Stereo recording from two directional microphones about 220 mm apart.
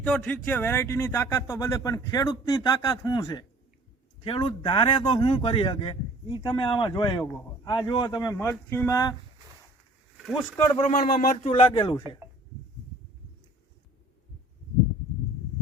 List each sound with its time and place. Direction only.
0.0 s speech: 5° left (ahead or behind)
10.9 s speech: 30° left (ahead or behind)